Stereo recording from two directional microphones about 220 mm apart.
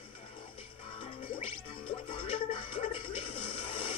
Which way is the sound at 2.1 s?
25° left (ahead or behind).